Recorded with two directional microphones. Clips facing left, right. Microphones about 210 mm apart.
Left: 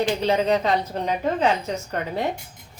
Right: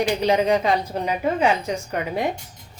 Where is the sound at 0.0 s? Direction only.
15° right (ahead or behind).